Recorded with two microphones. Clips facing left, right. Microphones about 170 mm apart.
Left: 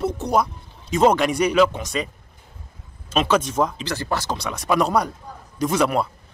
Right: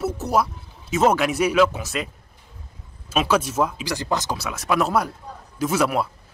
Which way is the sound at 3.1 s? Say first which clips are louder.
Left 1 dB; 5° right (ahead or behind).